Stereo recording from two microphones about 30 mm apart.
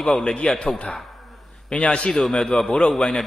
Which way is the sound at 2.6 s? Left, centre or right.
Left.